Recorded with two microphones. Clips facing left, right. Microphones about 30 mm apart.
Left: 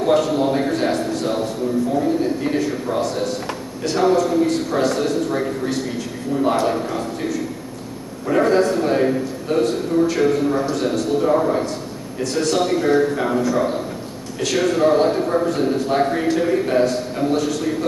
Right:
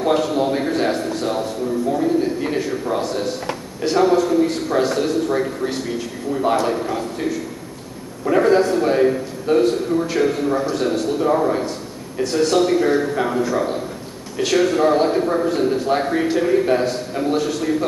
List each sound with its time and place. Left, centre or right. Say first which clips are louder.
0.0 s a man's voice: left 1 dB; centre